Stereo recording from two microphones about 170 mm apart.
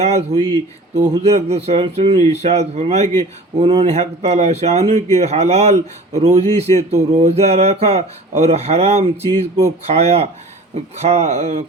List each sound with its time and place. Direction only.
0.0 s speech: 40° right (ahead or behind)